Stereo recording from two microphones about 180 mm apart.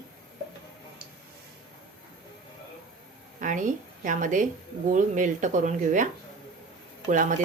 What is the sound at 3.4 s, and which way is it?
Speech, 45° right (ahead or behind).